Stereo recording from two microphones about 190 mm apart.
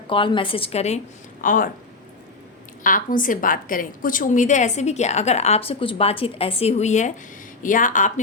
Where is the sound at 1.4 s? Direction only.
45° left (ahead or behind).